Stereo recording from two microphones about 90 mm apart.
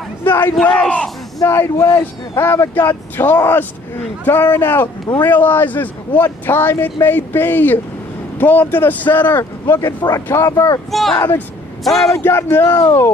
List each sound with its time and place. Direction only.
0.2 s speech: 20° left (ahead or behind)
1.4 s speech: 35° left (ahead or behind)
9.4 s speech: 35° left (ahead or behind)
9.9 s speech: 45° left (ahead or behind)
10.2 s speech: 30° left (ahead or behind)
10.5 s speech: 45° left (ahead or behind)
10.9 s a man's voice: centre (ahead or behind)
12.2 s speech: 25° left (ahead or behind)